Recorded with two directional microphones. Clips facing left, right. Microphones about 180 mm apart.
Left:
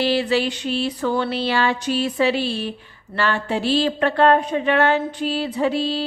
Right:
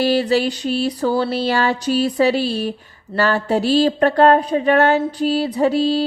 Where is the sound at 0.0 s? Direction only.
40° right (ahead or behind).